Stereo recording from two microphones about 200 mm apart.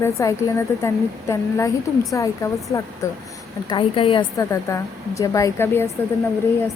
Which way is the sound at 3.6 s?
25° left (ahead or behind).